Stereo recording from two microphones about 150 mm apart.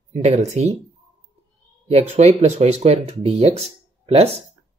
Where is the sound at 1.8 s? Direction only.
45° right (ahead or behind).